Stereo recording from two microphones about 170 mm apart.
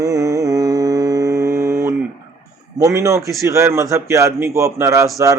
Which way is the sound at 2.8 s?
20° right (ahead or behind).